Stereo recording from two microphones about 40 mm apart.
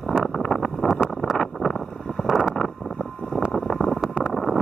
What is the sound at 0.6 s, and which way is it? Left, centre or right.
Vehicle, centre.